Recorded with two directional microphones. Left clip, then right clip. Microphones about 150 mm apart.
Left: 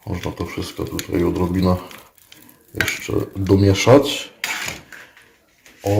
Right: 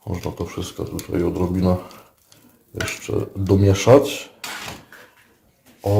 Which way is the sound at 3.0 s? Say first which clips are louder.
Left 2 dB; 5° left (ahead or behind).